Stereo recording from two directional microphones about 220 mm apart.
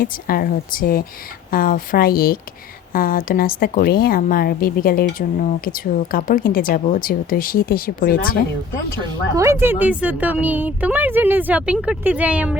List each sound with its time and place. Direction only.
0.0 s speech: 40° left (ahead or behind)
9.3 s speech: 15° right (ahead or behind)